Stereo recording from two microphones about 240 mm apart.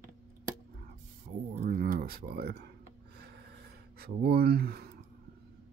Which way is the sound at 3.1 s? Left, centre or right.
Right.